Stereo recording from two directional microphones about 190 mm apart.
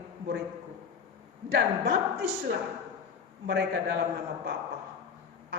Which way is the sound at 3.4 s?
60° right (ahead or behind).